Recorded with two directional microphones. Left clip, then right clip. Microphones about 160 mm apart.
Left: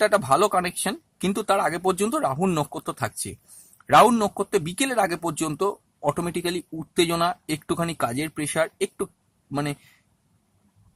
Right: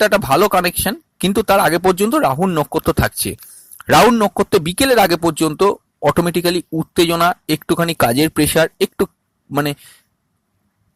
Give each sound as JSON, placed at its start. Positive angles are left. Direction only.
{"t": 0.0, "sound": "speech", "side_deg": -35}
{"t": 2.4, "sound": "speech", "side_deg": -20}
{"t": 2.7, "sound": "speech", "side_deg": -35}
{"t": 7.9, "sound": "speech", "side_deg": -45}